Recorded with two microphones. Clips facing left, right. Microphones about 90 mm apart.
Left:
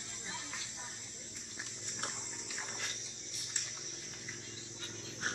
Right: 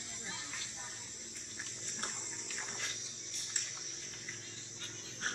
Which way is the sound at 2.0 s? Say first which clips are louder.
Left 1 dB; 5° left (ahead or behind).